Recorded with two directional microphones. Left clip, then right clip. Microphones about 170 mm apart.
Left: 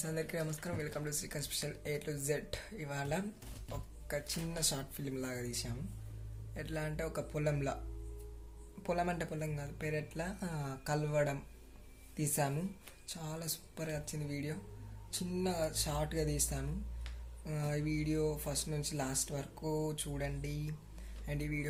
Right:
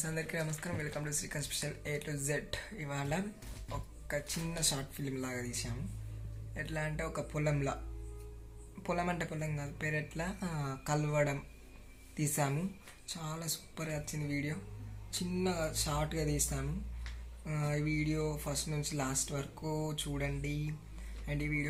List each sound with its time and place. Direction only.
0.0 s speech: 15° left (ahead or behind)
8.8 s speech: 15° left (ahead or behind)